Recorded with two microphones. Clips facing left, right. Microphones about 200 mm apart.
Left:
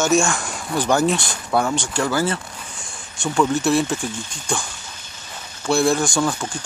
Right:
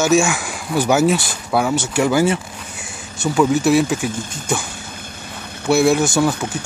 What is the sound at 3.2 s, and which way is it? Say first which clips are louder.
Speech: right 4 dB; 5° right (ahead or behind).